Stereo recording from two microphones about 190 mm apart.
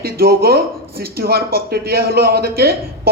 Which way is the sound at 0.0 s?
55° right (ahead or behind).